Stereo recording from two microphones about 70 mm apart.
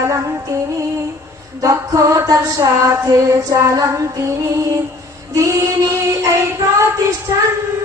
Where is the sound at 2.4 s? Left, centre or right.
Right.